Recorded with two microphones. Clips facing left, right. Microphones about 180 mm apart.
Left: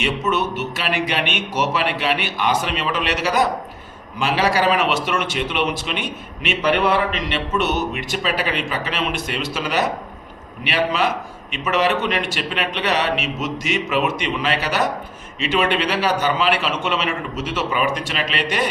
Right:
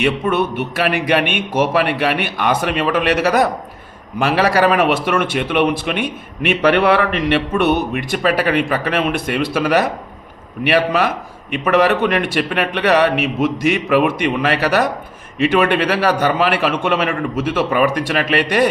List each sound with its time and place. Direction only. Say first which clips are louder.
0.0 s a man's voice: right 4 dB; 55° right (ahead or behind)